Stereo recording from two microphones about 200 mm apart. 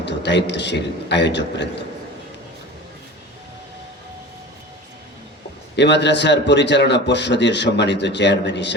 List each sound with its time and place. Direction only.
0.0 s a man's voice: 60° left (ahead or behind)
5.7 s a man's voice: 60° left (ahead or behind)